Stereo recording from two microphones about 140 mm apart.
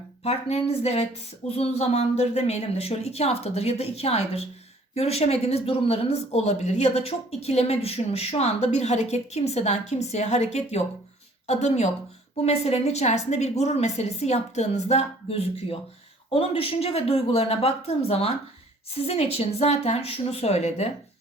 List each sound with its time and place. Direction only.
0.2 s speech: 50° left (ahead or behind)